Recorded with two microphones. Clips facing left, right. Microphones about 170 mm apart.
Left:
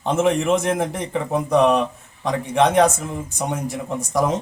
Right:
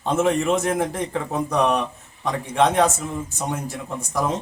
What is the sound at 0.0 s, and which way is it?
A man's voice, 20° left (ahead or behind).